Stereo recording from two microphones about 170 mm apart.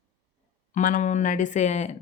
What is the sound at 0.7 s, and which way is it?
Speech, 50° left (ahead or behind).